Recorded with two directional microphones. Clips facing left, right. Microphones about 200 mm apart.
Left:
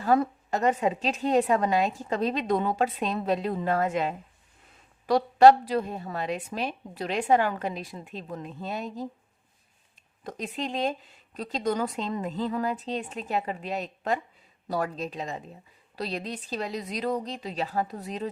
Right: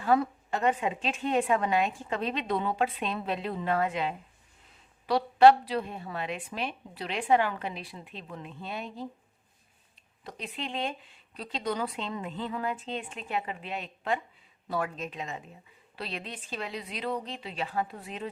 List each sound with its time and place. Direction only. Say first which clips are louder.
0.0 s a woman's voice: left 2 dB; 40° left (ahead or behind)
10.2 s a woman's voice: left 5 dB; 45° left (ahead or behind)